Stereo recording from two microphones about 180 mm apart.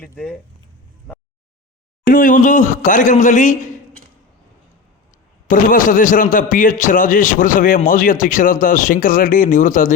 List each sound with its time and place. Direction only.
0.0 s speech: 5° left (ahead or behind)
2.0 s a man's voice: 50° left (ahead or behind)
5.5 s a man's voice: 50° left (ahead or behind)